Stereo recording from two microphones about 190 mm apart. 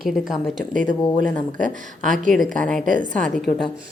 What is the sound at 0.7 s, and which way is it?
A woman's voice, 45° right (ahead or behind).